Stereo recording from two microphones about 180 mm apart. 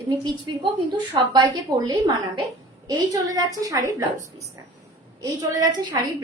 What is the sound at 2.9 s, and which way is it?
A woman's voice, 20° right (ahead or behind).